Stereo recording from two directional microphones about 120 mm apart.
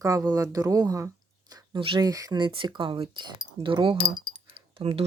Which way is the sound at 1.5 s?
40° right (ahead or behind).